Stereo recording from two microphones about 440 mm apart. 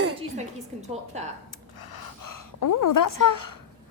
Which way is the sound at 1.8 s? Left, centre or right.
Left.